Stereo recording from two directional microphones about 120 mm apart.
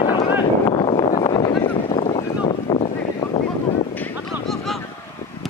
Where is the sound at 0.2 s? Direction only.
50° left (ahead or behind).